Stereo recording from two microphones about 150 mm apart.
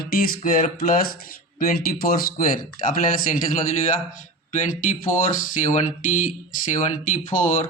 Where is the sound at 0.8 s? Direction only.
75° left (ahead or behind).